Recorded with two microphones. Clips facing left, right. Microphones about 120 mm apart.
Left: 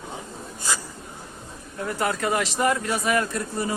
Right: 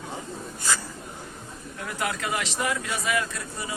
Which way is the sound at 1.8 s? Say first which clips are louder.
Left 5 dB; 40° left (ahead or behind).